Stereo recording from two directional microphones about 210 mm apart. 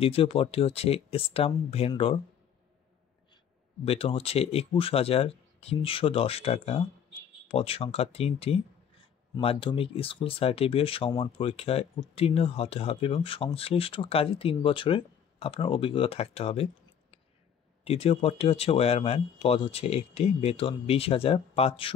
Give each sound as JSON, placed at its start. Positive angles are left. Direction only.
{"t": 0.0, "sound": "speech", "side_deg": 25}
{"t": 3.8, "sound": "speech", "side_deg": 30}
{"t": 17.8, "sound": "speech", "side_deg": 30}